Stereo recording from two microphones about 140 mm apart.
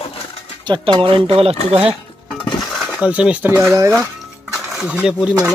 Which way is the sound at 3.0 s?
10° right (ahead or behind).